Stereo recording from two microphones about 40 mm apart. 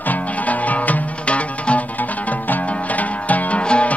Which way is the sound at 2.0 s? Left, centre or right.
Left.